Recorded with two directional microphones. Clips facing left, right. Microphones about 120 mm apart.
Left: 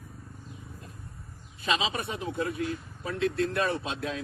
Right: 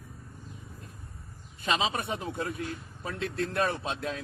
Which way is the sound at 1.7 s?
45° right (ahead or behind).